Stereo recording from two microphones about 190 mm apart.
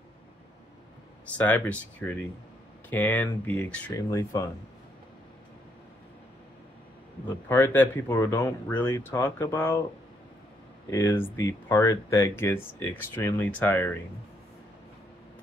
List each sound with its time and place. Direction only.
1.4 s speech: 10° left (ahead or behind)
7.4 s speech: 10° left (ahead or behind)
10.9 s speech: 15° left (ahead or behind)